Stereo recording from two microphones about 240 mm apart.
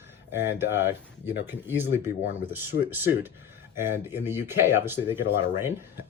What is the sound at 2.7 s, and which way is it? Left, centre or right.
Speech, left.